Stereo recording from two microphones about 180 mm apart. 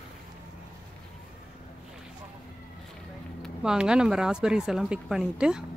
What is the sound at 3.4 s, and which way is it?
Speech, 5° right (ahead or behind).